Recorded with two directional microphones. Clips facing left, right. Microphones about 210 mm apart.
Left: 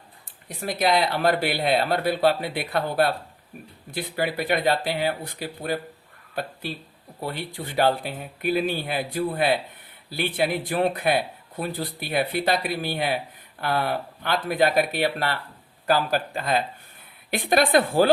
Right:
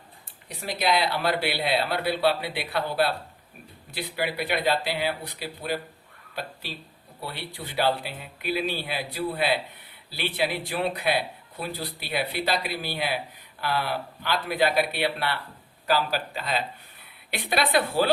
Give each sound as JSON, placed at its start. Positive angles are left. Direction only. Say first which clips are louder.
{"t": 0.4, "sound": "speech", "louder": "left 3 dB", "side_deg": 50}
{"t": 7.3, "sound": "speech", "louder": "left 5 dB", "side_deg": 50}